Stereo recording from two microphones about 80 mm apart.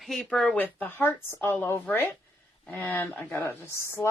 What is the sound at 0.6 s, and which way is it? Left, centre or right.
Speech, left.